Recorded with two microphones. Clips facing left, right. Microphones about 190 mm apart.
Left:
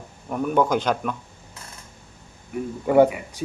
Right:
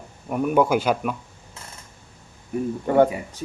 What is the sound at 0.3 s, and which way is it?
Speech, 10° right (ahead or behind).